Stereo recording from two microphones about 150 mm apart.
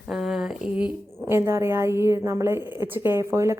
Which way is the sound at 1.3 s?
15° right (ahead or behind).